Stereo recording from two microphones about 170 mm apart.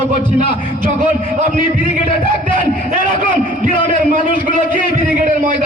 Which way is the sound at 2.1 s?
50° right (ahead or behind).